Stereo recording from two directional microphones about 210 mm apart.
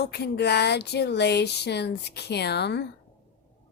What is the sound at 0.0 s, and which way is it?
Speech, 50° left (ahead or behind).